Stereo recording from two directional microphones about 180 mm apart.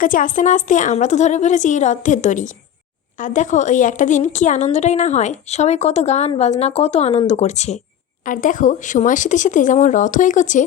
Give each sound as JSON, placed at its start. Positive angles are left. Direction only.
{"t": 0.0, "sound": "a woman's voice", "side_deg": 50}